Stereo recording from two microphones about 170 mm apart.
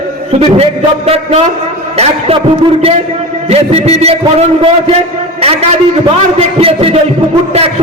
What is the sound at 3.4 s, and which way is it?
Speech, 35° right (ahead or behind).